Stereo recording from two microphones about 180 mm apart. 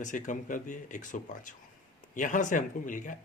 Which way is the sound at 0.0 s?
45° left (ahead or behind).